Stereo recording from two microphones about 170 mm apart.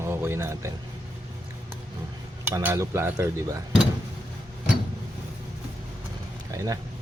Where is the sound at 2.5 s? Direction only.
15° right (ahead or behind).